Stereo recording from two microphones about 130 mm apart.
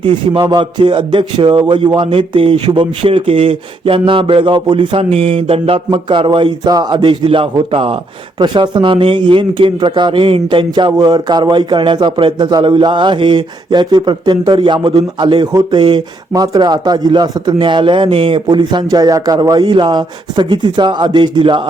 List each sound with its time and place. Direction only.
0.0 s speech: 35° right (ahead or behind)